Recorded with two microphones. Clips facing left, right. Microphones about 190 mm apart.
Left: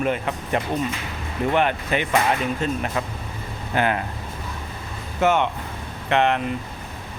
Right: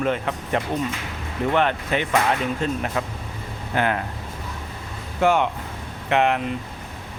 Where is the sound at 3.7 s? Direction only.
15° left (ahead or behind).